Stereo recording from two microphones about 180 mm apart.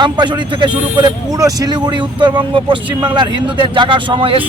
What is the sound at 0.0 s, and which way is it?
A man's voice, 25° right (ahead or behind).